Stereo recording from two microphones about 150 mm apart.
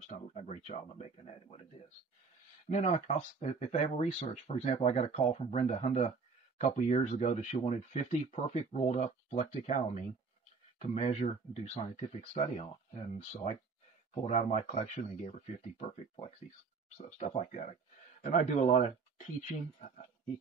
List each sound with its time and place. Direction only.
0.0 s speech: 50° left (ahead or behind)
2.7 s speech: 50° left (ahead or behind)